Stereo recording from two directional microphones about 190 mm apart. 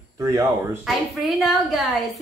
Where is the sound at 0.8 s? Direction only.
Centre (ahead or behind).